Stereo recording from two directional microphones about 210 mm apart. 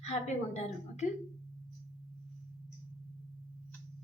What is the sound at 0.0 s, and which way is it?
A woman's voice, 30° left (ahead or behind).